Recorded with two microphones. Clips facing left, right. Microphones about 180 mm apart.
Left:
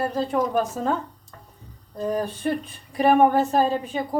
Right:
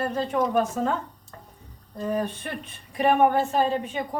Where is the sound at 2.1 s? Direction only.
35° left (ahead or behind).